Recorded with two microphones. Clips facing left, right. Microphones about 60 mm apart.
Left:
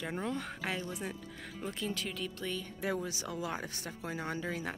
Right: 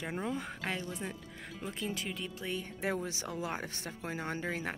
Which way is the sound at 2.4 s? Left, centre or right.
Right.